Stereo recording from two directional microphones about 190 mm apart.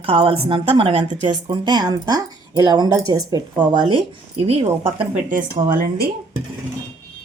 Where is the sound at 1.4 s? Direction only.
20° right (ahead or behind).